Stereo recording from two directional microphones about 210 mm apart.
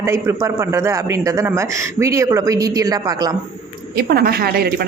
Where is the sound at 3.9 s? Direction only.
45° right (ahead or behind).